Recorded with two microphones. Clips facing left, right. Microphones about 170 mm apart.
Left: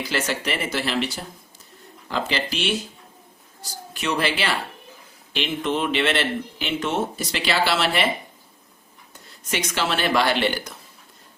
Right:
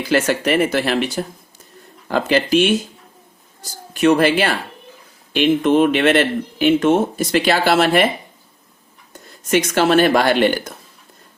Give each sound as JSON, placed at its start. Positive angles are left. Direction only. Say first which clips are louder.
{"t": 0.1, "sound": "speech", "louder": "right 11 dB", "side_deg": -50}
{"t": 3.9, "sound": "speech", "louder": "right 11 dB", "side_deg": -50}
{"t": 9.5, "sound": "speech", "louder": "right 10 dB", "side_deg": -50}